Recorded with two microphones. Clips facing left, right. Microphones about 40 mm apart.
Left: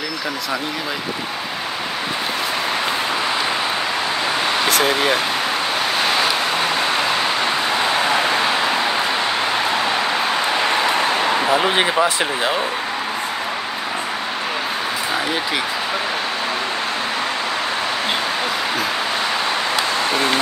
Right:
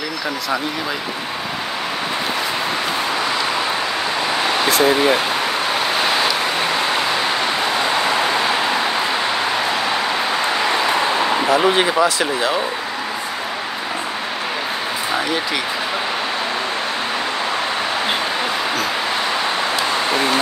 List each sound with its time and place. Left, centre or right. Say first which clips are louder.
11.5 s speech: right 3 dB; centre